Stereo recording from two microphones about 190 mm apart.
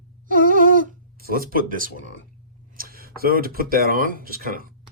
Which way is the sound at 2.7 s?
50° right (ahead or behind).